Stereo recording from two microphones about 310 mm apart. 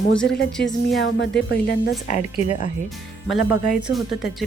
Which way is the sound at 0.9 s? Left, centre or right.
Left.